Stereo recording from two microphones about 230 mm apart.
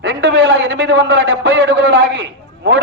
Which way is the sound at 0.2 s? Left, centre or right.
Right.